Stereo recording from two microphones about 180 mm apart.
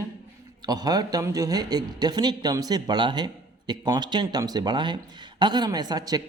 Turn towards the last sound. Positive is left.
turn(degrees=-20)  # may be behind; listen again after turning